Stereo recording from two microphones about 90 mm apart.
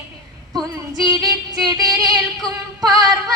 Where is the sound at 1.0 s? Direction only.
45° right (ahead or behind).